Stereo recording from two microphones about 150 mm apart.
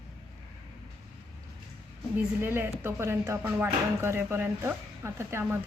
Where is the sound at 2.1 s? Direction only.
15° right (ahead or behind).